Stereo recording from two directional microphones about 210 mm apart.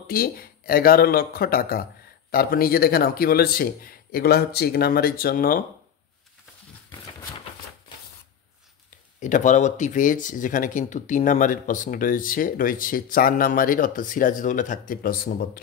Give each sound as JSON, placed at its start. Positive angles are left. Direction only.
{"t": 0.0, "sound": "speech", "side_deg": 45}
{"t": 9.2, "sound": "speech", "side_deg": 35}